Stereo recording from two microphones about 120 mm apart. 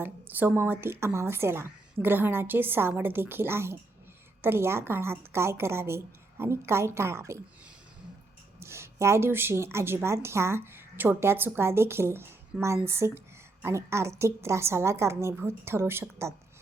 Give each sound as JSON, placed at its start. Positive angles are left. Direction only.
{"t": 0.0, "sound": "speech", "side_deg": -15}
{"t": 8.5, "sound": "speech", "side_deg": -20}